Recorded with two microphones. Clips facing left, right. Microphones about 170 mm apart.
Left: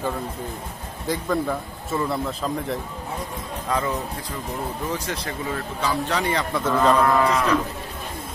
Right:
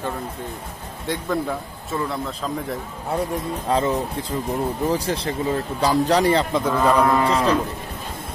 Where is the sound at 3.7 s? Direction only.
25° right (ahead or behind).